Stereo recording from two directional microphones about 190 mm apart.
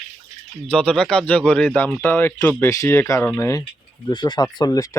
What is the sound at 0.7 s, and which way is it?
Speech, 5° left (ahead or behind).